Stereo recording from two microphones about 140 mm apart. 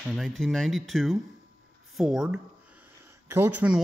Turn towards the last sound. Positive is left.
turn(degrees=-20)  # may be behind; listen again after turning